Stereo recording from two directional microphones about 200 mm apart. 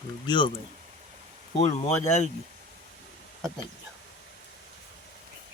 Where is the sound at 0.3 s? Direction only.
25° left (ahead or behind).